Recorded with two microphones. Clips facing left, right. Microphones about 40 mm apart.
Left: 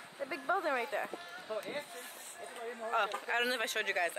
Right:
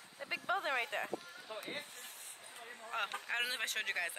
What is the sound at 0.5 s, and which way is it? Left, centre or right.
Speech, right.